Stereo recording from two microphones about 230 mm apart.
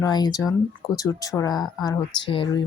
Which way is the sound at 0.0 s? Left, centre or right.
Centre.